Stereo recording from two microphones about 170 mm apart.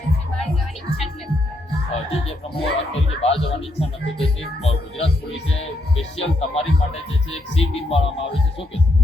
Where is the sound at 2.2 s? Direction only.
35° left (ahead or behind).